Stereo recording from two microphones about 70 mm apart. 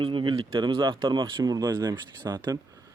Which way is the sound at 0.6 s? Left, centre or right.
Right.